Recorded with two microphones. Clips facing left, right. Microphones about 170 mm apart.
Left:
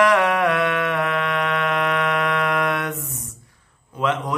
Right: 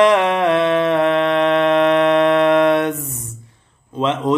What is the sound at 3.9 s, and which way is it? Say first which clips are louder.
Speech: right 6 dB; 20° right (ahead or behind).